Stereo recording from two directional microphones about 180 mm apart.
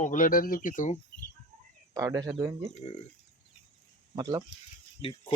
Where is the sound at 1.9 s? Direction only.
20° right (ahead or behind).